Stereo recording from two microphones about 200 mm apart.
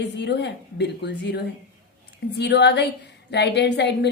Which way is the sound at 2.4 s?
60° left (ahead or behind).